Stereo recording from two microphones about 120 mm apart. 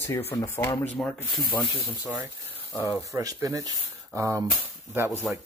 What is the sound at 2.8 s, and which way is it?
Speech, 20° right (ahead or behind).